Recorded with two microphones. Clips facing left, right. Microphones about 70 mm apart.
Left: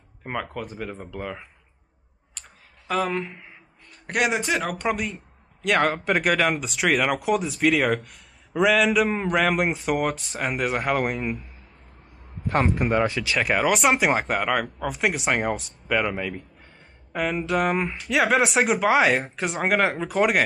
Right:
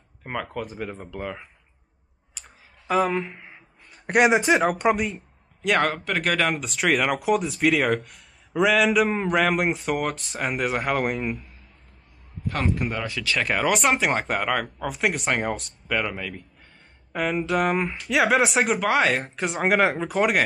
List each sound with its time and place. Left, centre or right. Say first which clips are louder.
0.2 s speech: even; centre
2.3 s clicking: even; centre
3.9 s a man's voice: right 5 dB; centre
6.0 s speech: left 3 dB; centre
6.3 s speech: left 1 dB; centre
12.4 s a man's voice: left 4 dB; left
13.2 s speech: left 1 dB; centre
13.5 s speech: left 1 dB; centre
17.1 s speech: even; centre